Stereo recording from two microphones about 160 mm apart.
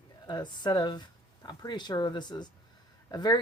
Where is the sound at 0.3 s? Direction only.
25° left (ahead or behind).